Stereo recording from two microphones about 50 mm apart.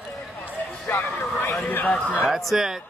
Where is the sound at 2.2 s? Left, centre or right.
Centre.